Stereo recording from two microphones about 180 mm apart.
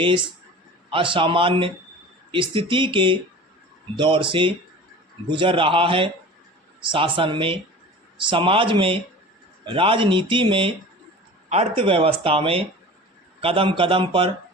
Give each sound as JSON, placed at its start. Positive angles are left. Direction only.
{"t": 0.9, "sound": "speech", "side_deg": -30}